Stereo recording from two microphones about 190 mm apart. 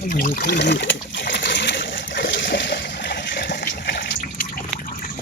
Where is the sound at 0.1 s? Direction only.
45° left (ahead or behind); by 4.4 s 60° left (ahead or behind).